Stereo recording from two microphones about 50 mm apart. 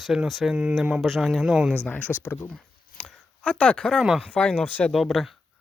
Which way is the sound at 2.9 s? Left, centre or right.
Left.